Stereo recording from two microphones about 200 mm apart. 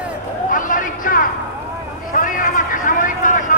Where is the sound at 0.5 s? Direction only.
40° left (ahead or behind).